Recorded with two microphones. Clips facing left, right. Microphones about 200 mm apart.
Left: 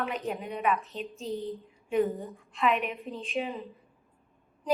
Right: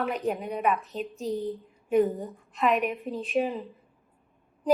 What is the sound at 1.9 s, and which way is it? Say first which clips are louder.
A woman's voice: right 4 dB; 45° right (ahead or behind).